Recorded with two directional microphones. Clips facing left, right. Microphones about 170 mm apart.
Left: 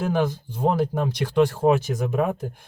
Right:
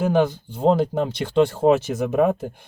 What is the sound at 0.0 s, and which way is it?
Speech, 20° right (ahead or behind).